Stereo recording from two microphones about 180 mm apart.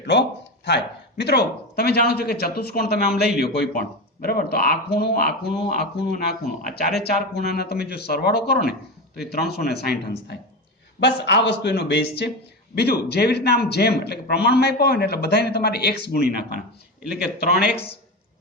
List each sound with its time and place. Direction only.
0.0 s a sound: 70° left (ahead or behind)
1.2 s speech: 65° left (ahead or behind)
17.0 s a man's voice: 5° right (ahead or behind)
17.4 s speech: 60° left (ahead or behind)